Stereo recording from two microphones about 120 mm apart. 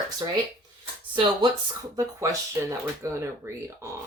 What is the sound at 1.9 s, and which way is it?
Speech, 30° right (ahead or behind).